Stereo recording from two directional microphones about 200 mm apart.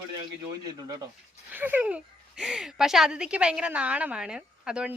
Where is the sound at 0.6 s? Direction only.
20° right (ahead or behind).